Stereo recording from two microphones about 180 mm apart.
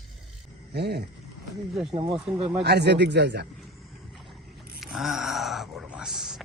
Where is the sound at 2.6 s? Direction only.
70° right (ahead or behind).